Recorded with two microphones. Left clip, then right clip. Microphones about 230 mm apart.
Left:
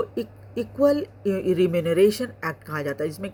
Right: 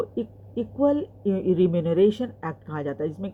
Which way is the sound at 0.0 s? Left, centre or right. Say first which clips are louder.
Left 1 dB; left.